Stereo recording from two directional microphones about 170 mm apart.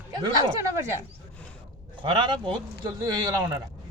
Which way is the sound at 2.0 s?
30° right (ahead or behind).